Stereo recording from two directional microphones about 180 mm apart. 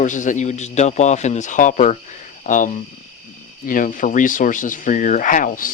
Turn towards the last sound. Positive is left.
turn(degrees=50)  # may be behind; listen again after turning